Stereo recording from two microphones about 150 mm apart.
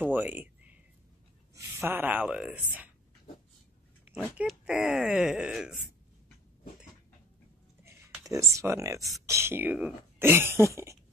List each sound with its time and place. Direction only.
0.0 s speech: 10° right (ahead or behind)
4.4 s speech: 5° right (ahead or behind)
8.3 s speech: 20° right (ahead or behind)